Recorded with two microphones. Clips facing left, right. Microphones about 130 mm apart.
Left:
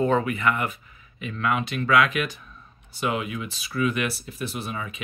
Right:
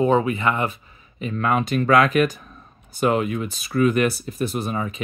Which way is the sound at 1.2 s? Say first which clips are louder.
Right 4 dB; 40° right (ahead or behind).